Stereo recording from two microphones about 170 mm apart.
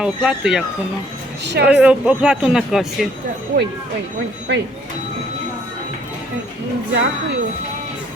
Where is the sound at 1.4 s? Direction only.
80° right.